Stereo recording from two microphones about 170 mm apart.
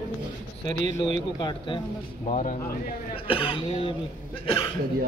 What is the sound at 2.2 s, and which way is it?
Speech, 45° left (ahead or behind).